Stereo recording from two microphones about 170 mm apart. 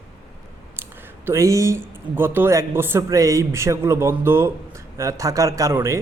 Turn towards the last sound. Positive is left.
turn(degrees=-15)  # may be behind; listen again after turning